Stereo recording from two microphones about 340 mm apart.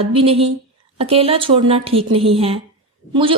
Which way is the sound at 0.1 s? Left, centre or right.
Centre.